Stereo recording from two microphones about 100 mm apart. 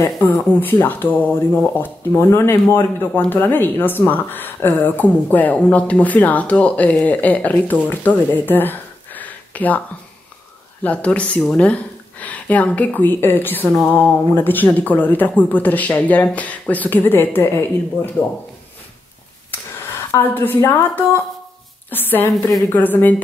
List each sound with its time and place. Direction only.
0.0 s speech: 20° left (ahead or behind)
10.8 s speech: 15° left (ahead or behind)
20.1 s speech: 20° left (ahead or behind)